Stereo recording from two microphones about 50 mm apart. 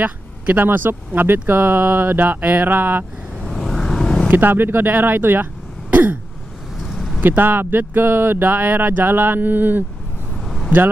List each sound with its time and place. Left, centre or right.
0.0 s speech: right
3.3 s vehicle: centre
4.3 s speech: right
6.8 s vehicle: centre
7.2 s speech: right
10.3 s a sound: centre